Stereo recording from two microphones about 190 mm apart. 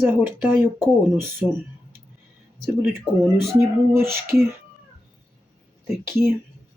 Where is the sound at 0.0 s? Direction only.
10° right (ahead or behind).